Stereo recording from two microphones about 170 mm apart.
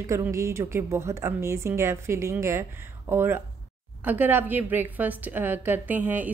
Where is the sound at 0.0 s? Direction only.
15° right (ahead or behind).